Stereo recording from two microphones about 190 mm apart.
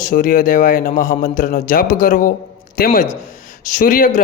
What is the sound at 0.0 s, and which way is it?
A man's voice, 45° left (ahead or behind).